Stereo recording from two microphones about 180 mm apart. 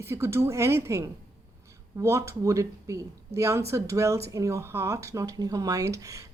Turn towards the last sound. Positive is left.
turn(degrees=-15)  # may be behind; listen again after turning